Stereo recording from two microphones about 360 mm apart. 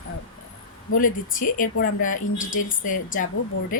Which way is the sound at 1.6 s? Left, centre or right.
Left.